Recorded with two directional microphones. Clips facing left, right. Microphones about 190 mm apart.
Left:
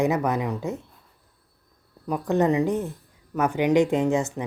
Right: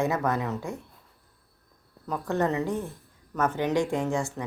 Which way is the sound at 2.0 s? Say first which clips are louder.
Left 5 dB; 15° left (ahead or behind).